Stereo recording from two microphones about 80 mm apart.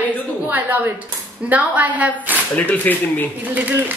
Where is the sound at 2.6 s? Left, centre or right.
Left.